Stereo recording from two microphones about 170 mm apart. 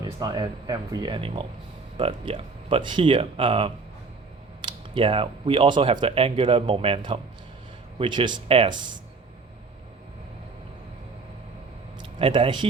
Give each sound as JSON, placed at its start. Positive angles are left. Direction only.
{"t": 0.0, "sound": "speech", "side_deg": -25}
{"t": 12.2, "sound": "speech", "side_deg": -30}